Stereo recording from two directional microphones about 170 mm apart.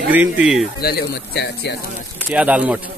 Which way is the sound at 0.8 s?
75° left (ahead or behind).